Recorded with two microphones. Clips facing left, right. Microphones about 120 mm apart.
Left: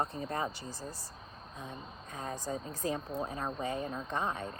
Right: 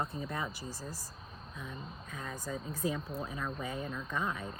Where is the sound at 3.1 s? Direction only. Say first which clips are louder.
Left 3 dB; 20° left (ahead or behind).